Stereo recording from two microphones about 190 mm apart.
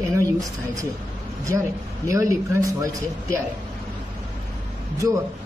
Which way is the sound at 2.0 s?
15° right (ahead or behind).